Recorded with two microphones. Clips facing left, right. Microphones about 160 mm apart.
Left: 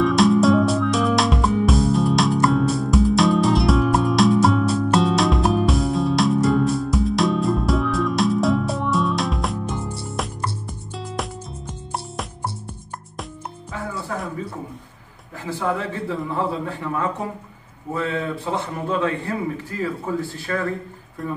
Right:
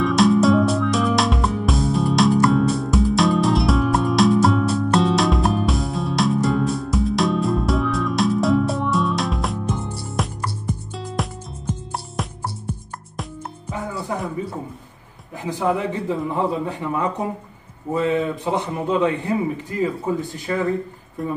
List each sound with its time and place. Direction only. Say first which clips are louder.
0.0 s music: even; centre (ahead or behind)
13.7 s music: right 2 dB; 20° right (ahead or behind)
15.4 s a man's voice: right 3 dB; 15° right (ahead or behind)